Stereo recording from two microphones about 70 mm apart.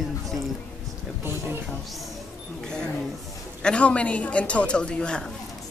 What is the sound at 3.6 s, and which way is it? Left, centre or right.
A woman's voice, centre.